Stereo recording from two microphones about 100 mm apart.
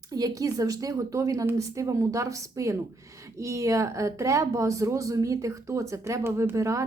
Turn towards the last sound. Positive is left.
turn(degrees=-30)  # may be behind; listen again after turning